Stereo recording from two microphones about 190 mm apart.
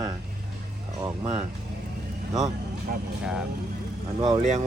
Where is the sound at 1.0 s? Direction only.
15° right (ahead or behind).